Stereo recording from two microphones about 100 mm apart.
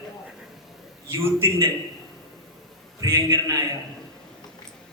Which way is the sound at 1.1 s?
25° right (ahead or behind).